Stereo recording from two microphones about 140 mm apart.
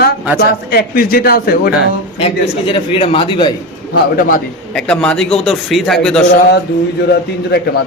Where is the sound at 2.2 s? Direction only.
40° left (ahead or behind).